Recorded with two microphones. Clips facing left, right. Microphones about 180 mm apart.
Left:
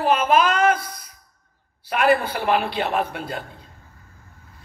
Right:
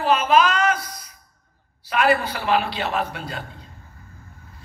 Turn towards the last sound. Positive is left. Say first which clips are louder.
# left 2 dB
turn(degrees=55)  # may be behind; listen again after turning